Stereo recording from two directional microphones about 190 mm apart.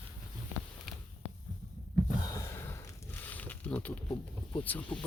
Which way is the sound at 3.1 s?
10° left (ahead or behind).